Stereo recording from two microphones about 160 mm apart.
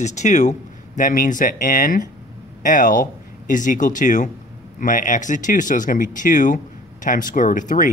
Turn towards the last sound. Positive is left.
turn(degrees=55)  # may be behind; listen again after turning